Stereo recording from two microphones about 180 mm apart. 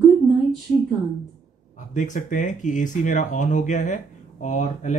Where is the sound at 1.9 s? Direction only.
45° left (ahead or behind).